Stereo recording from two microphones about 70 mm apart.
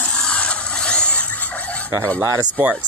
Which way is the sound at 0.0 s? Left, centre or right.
Centre.